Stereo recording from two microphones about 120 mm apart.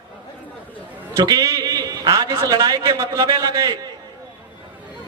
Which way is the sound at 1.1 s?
35° right (ahead or behind).